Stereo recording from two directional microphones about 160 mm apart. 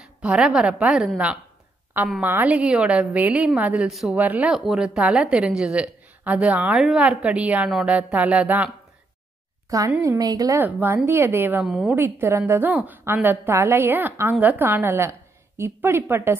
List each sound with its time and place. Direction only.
0.0 s a woman's voice: 5° right (ahead or behind)
9.7 s a woman's voice: 20° right (ahead or behind)